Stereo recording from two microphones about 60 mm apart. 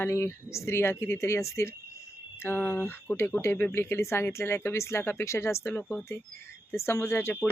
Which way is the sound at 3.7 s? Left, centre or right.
Left.